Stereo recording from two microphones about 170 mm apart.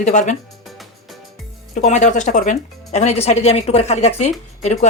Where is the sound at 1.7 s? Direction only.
45° left (ahead or behind).